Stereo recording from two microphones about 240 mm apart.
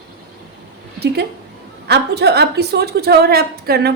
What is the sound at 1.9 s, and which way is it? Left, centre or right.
A woman's voice, right.